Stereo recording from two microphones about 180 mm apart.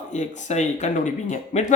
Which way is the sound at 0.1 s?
40° left (ahead or behind).